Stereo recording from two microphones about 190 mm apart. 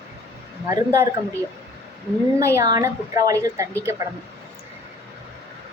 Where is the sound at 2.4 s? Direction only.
15° right (ahead or behind).